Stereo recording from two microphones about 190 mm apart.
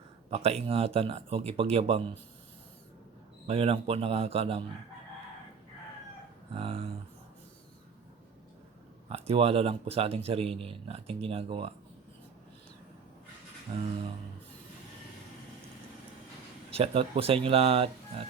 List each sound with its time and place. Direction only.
0.3 s speech: 35° right (ahead or behind)
3.4 s speech: 30° right (ahead or behind)
6.5 s a sound: 30° right (ahead or behind)
9.0 s speech: 30° right (ahead or behind)
13.7 s a sound: 25° right (ahead or behind)
16.7 s speech: 30° right (ahead or behind)